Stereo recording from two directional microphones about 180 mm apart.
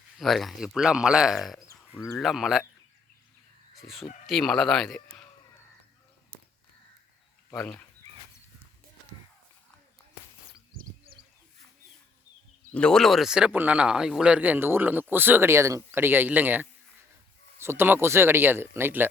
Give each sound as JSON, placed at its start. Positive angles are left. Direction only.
{"t": 0.2, "sound": "speech", "side_deg": 0}
{"t": 1.7, "sound": "a sound", "side_deg": 20}
{"t": 2.1, "sound": "speech", "side_deg": 0}
{"t": 4.3, "sound": "speech", "side_deg": 0}
{"t": 7.5, "sound": "speech", "side_deg": 10}
{"t": 12.7, "sound": "speech", "side_deg": 5}